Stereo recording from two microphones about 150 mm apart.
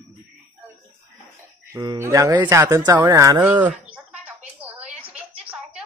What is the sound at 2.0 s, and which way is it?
Speech, 20° right (ahead or behind).